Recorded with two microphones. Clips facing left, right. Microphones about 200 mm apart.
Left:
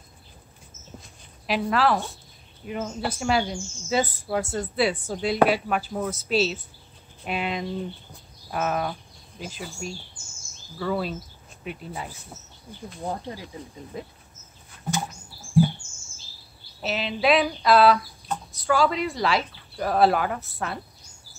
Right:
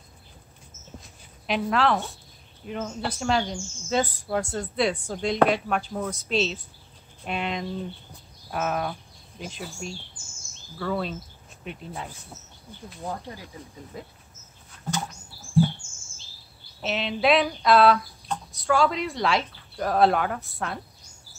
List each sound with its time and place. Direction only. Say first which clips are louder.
1.0 s a sound: left 1 dB; centre (ahead or behind)
2.6 s speech: left 1 dB; 5° left (ahead or behind)
13.0 s speech: left 3 dB; 25° left (ahead or behind)
16.8 s speech: even; centre (ahead or behind)